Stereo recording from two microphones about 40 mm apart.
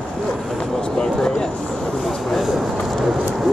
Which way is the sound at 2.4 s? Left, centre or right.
Centre.